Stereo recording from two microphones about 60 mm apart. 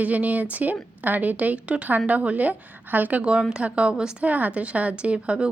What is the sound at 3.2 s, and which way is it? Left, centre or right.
A woman's voice, centre.